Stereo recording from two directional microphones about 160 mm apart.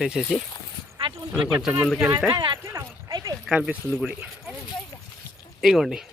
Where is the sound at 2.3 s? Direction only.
30° right (ahead or behind).